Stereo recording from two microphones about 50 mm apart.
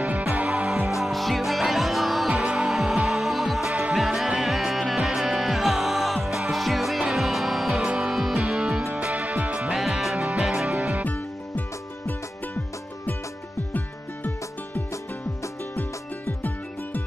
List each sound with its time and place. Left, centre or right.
0.3 s music: right
1.0 s music: centre
2.3 s music: centre
2.7 s music: centre
3.6 s music: right
3.9 s music: centre
7.7 s music: centre
8.5 s music: right
9.8 s music: centre
10.1 s music: right
11.1 s music: left